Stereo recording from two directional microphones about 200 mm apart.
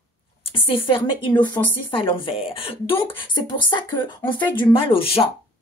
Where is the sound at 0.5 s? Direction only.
25° left (ahead or behind).